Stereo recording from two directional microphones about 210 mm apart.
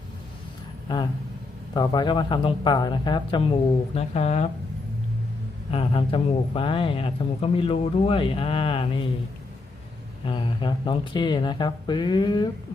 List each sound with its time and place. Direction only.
0.9 s a man's voice: 20° left (ahead or behind)
5.7 s a man's voice: 25° left (ahead or behind)
10.2 s a man's voice: 25° left (ahead or behind)